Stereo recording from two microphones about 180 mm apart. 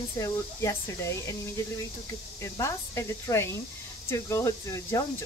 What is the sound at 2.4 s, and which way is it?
Speech, 15° left (ahead or behind).